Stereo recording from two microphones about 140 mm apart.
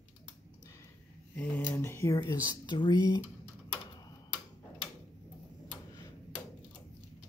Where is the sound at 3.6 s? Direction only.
30° left (ahead or behind).